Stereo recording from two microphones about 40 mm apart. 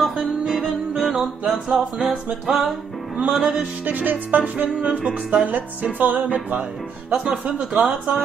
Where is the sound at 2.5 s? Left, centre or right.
Right.